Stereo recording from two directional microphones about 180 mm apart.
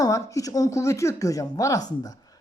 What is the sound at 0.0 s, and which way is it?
Speech, 20° left (ahead or behind).